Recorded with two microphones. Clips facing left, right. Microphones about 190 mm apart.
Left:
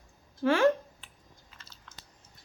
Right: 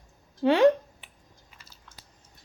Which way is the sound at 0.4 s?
20° right (ahead or behind).